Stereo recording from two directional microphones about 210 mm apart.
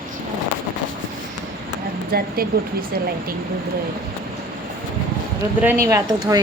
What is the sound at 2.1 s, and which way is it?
Speech, 45° right (ahead or behind).